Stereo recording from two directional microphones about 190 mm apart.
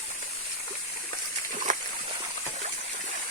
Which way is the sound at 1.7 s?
40° right (ahead or behind).